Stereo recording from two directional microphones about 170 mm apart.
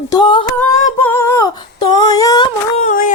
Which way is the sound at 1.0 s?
10° left (ahead or behind).